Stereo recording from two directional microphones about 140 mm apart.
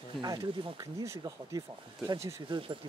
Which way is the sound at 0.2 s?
25° right (ahead or behind).